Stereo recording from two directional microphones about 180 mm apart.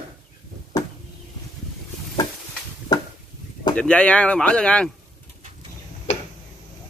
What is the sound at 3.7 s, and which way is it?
Speech, 5° left (ahead or behind).